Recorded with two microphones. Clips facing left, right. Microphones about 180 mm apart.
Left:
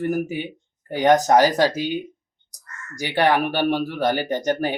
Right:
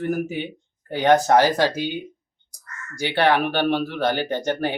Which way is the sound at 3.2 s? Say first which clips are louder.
Even; 10° left (ahead or behind).